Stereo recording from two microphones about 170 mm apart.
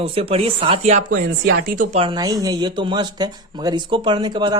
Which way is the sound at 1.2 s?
65° right (ahead or behind).